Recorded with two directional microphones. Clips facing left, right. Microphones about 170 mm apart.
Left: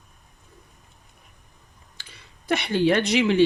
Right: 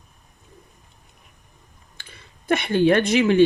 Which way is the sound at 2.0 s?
50° right (ahead or behind).